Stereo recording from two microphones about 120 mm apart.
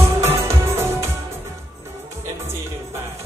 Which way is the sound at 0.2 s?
20° right (ahead or behind).